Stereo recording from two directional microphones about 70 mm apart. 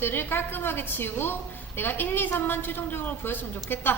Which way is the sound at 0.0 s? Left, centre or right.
Left.